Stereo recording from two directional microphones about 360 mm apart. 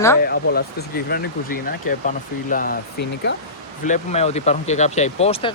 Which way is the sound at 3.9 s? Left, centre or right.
Centre.